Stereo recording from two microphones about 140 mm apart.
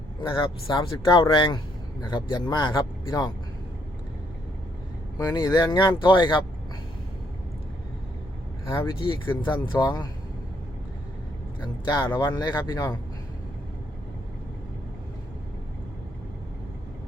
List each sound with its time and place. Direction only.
0.2 s speech: 35° left (ahead or behind)
5.1 s speech: 25° left (ahead or behind)
9.0 s speech: 35° left (ahead or behind)
11.6 s speech: 30° left (ahead or behind)